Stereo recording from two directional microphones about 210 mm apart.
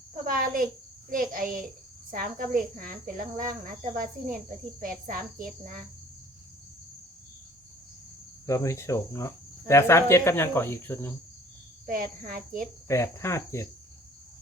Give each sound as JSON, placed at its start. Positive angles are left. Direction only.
{"t": 0.1, "sound": "speech", "side_deg": -40}
{"t": 8.4, "sound": "speech", "side_deg": 15}
{"t": 11.9, "sound": "speech", "side_deg": -40}
{"t": 12.9, "sound": "speech", "side_deg": 15}